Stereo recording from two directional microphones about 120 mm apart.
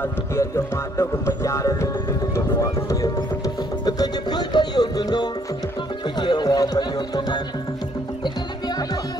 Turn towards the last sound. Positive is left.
turn(degrees=35)  # may be behind; listen again after turning